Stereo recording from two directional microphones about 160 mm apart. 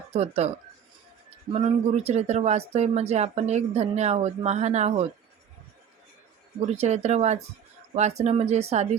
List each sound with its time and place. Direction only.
0.1 s speech: 40° right (ahead or behind)
1.5 s speech: 40° right (ahead or behind)
6.7 s speech: 45° right (ahead or behind)